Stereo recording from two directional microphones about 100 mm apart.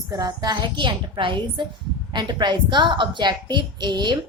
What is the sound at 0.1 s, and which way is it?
A woman's voice, 40° right (ahead or behind).